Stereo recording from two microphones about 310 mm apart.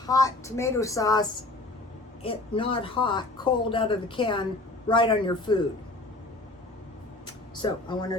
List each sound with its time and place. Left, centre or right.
0.0 s speech: centre
2.2 s speech: centre
7.6 s speech: centre